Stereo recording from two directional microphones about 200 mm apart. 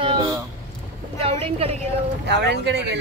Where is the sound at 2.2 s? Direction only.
55° right (ahead or behind).